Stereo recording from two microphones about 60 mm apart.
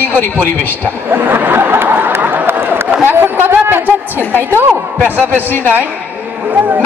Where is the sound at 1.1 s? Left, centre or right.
Right.